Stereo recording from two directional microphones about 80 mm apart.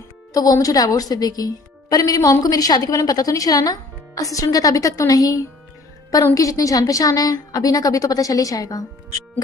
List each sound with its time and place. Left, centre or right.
0.3 s speech: left